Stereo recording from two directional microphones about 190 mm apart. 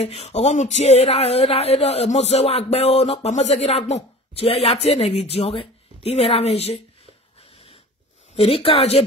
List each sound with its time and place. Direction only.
0.0 s speech: 35° left (ahead or behind)
7.5 s wheeze: 30° left (ahead or behind)
8.4 s speech: 30° left (ahead or behind)